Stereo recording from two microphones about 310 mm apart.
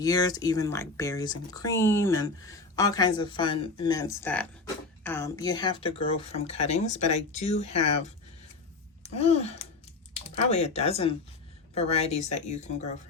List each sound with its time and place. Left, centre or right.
0.0 s speech: centre
9.1 s speech: left